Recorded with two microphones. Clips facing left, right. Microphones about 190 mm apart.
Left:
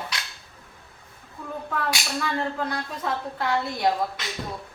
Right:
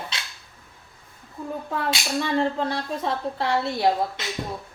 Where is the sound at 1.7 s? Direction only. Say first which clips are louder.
Right 2 dB; 25° right (ahead or behind).